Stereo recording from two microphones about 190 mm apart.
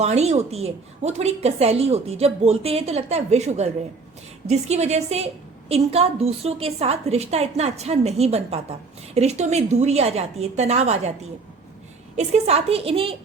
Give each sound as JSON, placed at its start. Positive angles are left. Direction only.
{"t": 0.0, "sound": "a woman's voice", "side_deg": -35}
{"t": 12.1, "sound": "a woman's voice", "side_deg": -35}